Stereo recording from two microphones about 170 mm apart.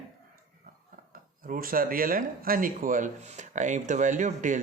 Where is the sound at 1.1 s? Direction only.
55° right (ahead or behind).